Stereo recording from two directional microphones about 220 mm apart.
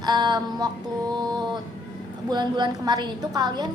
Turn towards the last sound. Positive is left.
turn(degrees=-20)  # may be behind; listen again after turning